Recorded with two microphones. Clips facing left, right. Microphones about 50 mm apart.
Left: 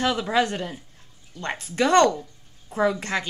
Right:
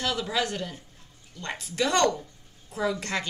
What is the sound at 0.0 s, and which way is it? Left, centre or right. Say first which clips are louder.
A woman's voice: left 6 dB; left.